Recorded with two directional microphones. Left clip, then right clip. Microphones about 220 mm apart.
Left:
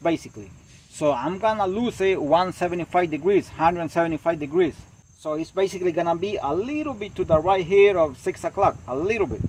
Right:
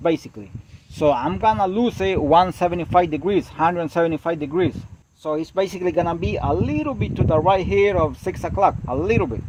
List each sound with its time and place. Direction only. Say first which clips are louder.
0.9 s speech: right 4 dB; 45° right (ahead or behind)